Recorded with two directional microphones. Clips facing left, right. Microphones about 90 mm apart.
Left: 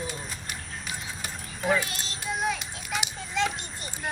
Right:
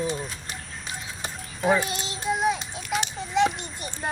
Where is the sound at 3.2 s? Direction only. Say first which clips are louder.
Right 7 dB; 20° right (ahead or behind).